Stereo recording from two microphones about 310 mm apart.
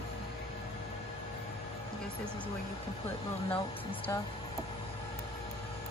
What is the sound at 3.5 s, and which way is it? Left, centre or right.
Speech, centre.